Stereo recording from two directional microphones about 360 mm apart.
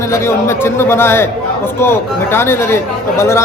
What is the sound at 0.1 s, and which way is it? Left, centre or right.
A man's voice, centre.